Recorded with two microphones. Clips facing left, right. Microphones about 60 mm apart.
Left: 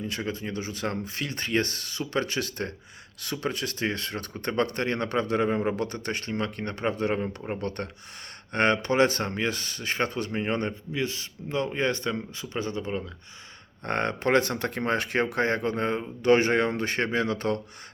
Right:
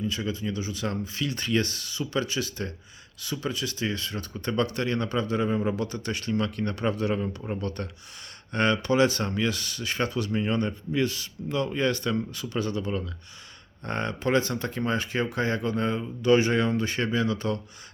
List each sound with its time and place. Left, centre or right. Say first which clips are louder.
0.0 s speech: right 2 dB; left
11.0 s speech: right 3 dB; left
13.8 s speech: left 2 dB; left